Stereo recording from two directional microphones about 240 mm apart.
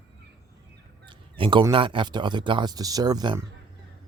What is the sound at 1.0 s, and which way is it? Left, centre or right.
Speech, centre.